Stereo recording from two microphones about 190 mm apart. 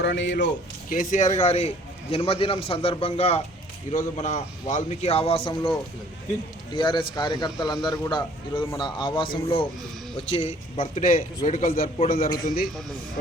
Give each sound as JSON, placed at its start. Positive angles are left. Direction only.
{"t": 0.0, "sound": "speech", "side_deg": 60}
{"t": 0.9, "sound": "a man's voice", "side_deg": 40}
{"t": 6.7, "sound": "a man's voice", "side_deg": 25}